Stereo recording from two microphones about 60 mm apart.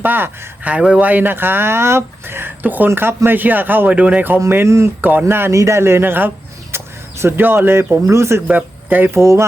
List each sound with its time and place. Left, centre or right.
0.0 s speech: right
3.9 s speech: right
4.4 s a man's voice: right
4.9 s speech: right
5.5 s a man's voice: right
6.7 s a sound: right
8.0 s a man's voice: right
8.4 s speech: right
9.1 s a man's voice: right